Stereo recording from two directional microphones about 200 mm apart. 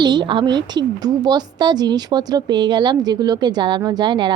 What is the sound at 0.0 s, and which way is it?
A woman's voice, 20° right (ahead or behind).